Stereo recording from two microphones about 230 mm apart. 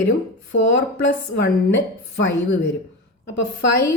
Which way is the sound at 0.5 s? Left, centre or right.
Left.